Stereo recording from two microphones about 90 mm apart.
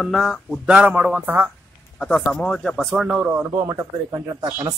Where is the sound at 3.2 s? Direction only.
20° right (ahead or behind).